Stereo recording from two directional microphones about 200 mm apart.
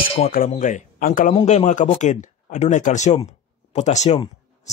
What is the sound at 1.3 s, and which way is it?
Speech, 30° left (ahead or behind).